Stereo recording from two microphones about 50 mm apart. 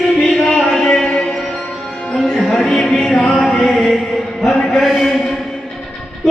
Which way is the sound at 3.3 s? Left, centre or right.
Centre.